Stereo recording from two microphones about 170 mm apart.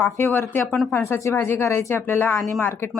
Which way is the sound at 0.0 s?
10° left (ahead or behind).